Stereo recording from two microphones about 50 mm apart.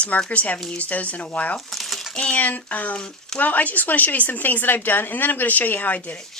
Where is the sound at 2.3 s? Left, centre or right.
Left.